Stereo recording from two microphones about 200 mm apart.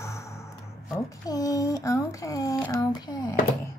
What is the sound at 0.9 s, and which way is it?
Speech, 15° left (ahead or behind).